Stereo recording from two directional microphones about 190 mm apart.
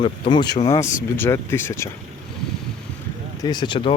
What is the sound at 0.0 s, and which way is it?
Speech, 25° left (ahead or behind).